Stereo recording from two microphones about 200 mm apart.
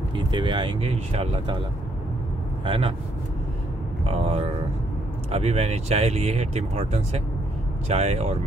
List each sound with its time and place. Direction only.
0.1 s speech: 25° right (ahead or behind)
2.6 s speech: 25° right (ahead or behind)
4.0 s speech: 30° right (ahead or behind)